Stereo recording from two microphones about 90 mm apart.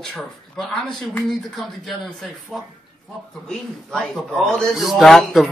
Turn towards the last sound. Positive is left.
turn(degrees=0)  # may be behind; listen again after turning